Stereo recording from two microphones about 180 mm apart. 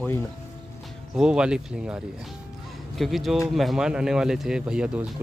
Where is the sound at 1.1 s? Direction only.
5° right (ahead or behind).